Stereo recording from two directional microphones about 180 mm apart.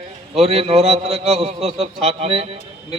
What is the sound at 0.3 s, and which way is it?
Speech, 35° right (ahead or behind).